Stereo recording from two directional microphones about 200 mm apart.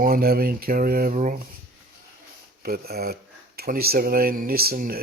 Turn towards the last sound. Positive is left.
turn(degrees=-45)  # may be behind; listen again after turning